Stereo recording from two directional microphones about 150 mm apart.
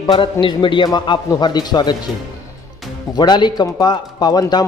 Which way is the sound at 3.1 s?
30° left (ahead or behind).